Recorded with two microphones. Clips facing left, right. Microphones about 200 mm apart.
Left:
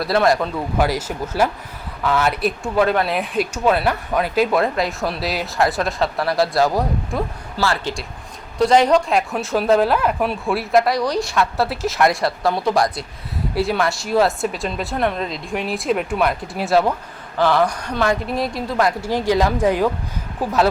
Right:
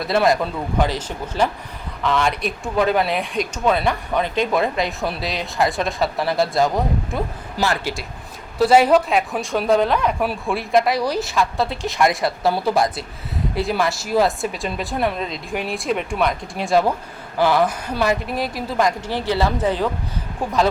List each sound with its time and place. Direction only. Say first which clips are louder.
0.1 s speech: even; centre (ahead or behind)
7.5 s speech: even; 15° right (ahead or behind)
8.5 s speech: right 1 dB; 5° right (ahead or behind)
17.3 s speech: even; 10° right (ahead or behind)
18.9 s speech: left 3 dB; 10° left (ahead or behind)